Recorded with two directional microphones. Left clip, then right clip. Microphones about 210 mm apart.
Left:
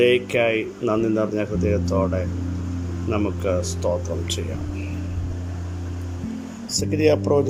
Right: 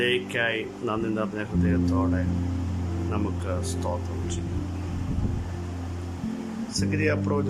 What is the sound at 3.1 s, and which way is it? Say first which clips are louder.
Speech: left 9 dB; 10° left (ahead or behind).